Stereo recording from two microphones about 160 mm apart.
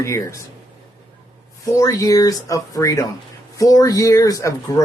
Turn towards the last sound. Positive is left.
turn(degrees=20)  # may be behind; listen again after turning